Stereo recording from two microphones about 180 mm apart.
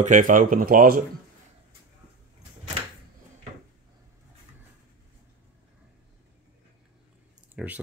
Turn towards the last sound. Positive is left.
turn(degrees=-5)  # may be behind; listen again after turning